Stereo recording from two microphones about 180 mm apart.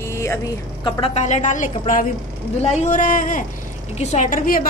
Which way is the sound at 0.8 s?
30° left (ahead or behind).